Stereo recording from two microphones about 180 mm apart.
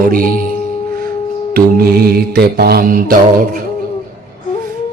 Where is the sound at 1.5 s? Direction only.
55° right (ahead or behind).